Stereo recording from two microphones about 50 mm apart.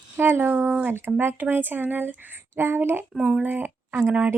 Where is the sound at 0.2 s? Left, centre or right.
Right.